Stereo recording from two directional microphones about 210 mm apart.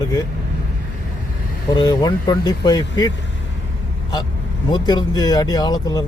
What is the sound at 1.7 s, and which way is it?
Speech, 20° left (ahead or behind).